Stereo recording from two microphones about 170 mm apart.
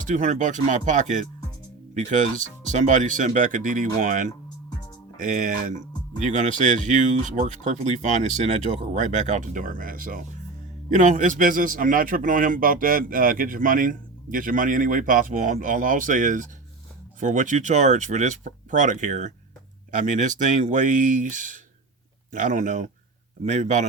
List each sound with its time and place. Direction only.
0.0 s a man's voice: 45° right (ahead or behind)